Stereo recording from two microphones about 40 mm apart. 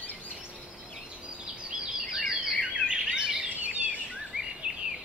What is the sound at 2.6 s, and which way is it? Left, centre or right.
Bird vocalization, right.